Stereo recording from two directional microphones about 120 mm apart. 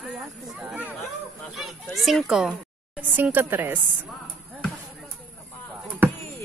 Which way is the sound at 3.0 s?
15° right (ahead or behind).